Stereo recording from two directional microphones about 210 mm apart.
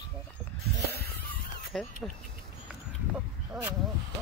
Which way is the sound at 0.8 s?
50° left (ahead or behind).